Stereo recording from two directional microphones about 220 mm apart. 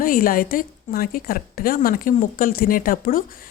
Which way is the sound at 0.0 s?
40° left (ahead or behind).